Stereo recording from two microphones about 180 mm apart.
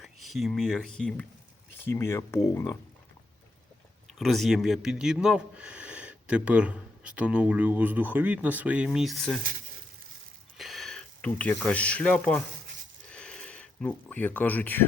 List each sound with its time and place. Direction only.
0.0 s speech: centre (ahead or behind); by 2.7 s 15° left (ahead or behind)
4.2 s speech: centre (ahead or behind)
10.6 s speech: centre (ahead or behind)
13.1 s a sound: 5° left (ahead or behind)